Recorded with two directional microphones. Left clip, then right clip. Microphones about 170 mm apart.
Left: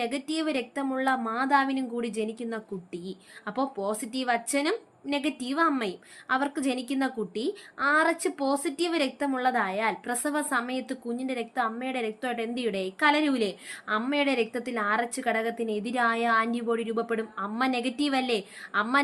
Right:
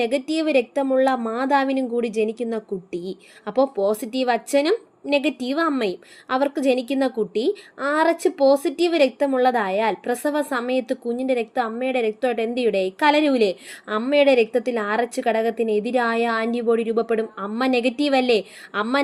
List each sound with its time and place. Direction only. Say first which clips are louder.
0.0 s a woman's voice: right 8 dB; 30° right (ahead or behind)